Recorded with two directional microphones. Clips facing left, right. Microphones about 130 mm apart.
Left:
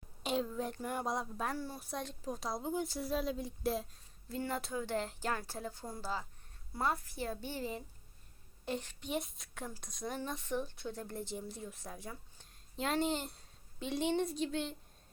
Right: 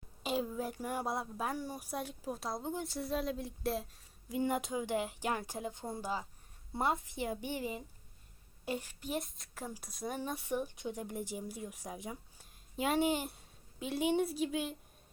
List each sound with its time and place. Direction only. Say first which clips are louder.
0.2 s a woman's voice: even; 5° right (ahead or behind)
4.3 s a woman's voice: right 4 dB; 15° right (ahead or behind)